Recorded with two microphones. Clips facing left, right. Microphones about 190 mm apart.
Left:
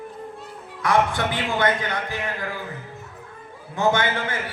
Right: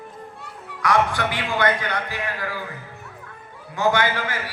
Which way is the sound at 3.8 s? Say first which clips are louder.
Even; 25° left (ahead or behind).